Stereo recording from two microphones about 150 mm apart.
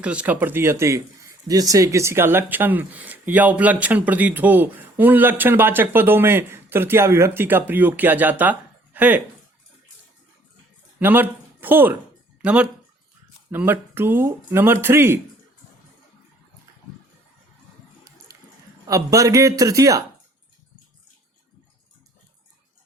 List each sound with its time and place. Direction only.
0.0 s speech: 10° right (ahead or behind)
11.0 s speech: 15° right (ahead or behind)
18.3 s a sound: 20° right (ahead or behind)
18.9 s a man's voice: 20° right (ahead or behind)